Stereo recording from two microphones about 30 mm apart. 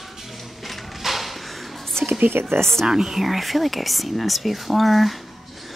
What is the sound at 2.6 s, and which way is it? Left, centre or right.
Speech, centre.